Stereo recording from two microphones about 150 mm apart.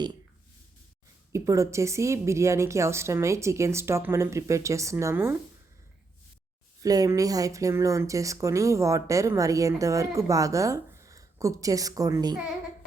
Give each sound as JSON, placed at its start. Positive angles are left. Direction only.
{"t": 1.3, "sound": "speech", "side_deg": -20}
{"t": 6.8, "sound": "speech", "side_deg": -25}